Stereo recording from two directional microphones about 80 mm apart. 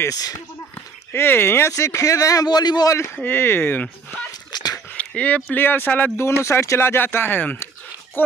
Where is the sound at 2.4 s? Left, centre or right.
Left.